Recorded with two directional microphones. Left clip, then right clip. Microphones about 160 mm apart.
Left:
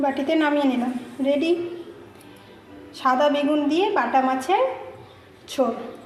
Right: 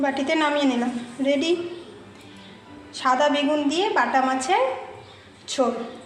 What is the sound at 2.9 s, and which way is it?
A woman's voice, 15° left (ahead or behind).